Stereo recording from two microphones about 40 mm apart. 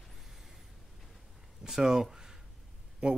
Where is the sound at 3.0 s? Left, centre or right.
Right.